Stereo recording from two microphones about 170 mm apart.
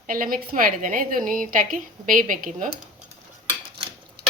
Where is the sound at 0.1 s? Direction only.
55° right (ahead or behind).